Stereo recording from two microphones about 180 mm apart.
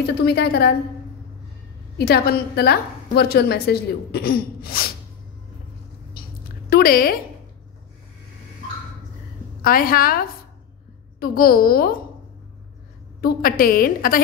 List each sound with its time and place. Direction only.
0.0 s a woman's voice: 65° left (ahead or behind)
2.0 s a woman's voice: 60° left (ahead or behind)
6.2 s a sound: 55° left (ahead or behind)
6.7 s speech: 55° left (ahead or behind)
9.6 s a woman's voice: 50° left (ahead or behind)
13.2 s a woman's voice: 55° left (ahead or behind)